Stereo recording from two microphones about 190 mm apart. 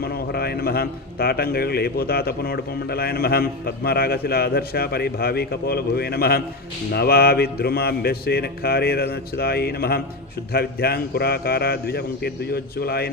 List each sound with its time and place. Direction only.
0.0 s a man's voice: 55° left (ahead or behind)